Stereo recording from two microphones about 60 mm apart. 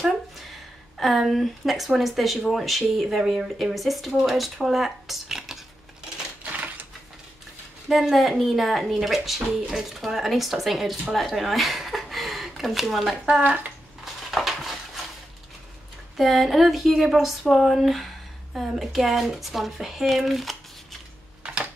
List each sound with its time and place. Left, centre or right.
0.9 s speech: centre
6.4 s typewriter: right
7.9 s speech: centre
14.3 s a sound: centre
16.2 s speech: centre